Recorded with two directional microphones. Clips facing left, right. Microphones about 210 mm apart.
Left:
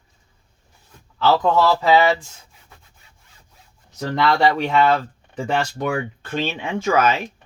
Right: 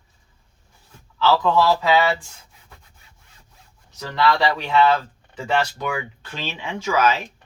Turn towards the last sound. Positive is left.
turn(degrees=55)  # may be behind; listen again after turning